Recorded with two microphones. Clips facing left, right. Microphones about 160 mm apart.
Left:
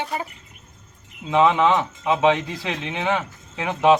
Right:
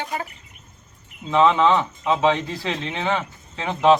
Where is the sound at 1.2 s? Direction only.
15° left (ahead or behind).